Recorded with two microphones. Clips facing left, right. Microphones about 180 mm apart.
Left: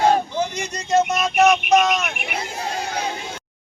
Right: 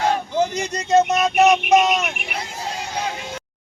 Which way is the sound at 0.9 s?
20° right (ahead or behind).